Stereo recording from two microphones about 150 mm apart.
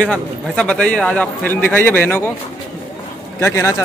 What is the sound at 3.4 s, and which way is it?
Speech, 15° left (ahead or behind).